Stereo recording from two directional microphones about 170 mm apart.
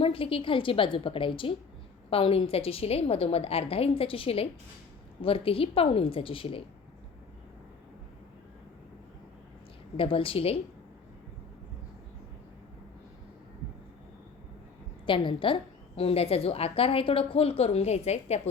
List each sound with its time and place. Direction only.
0.0 s a woman's voice: 35° left (ahead or behind)
10.0 s a woman's voice: 30° left (ahead or behind)
15.0 s a woman's voice: 30° left (ahead or behind)